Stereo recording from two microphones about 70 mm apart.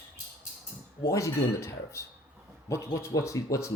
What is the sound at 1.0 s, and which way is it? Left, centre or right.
Speech, left.